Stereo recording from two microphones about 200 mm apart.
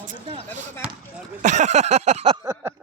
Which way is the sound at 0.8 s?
5° right (ahead or behind).